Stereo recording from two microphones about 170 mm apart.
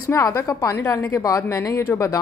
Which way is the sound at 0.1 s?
15° left (ahead or behind).